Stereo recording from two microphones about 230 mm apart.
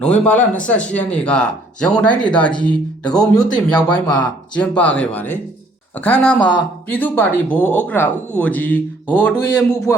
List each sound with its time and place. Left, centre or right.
0.0 s speech: centre
3.3 s speech: centre
3.8 s speech: centre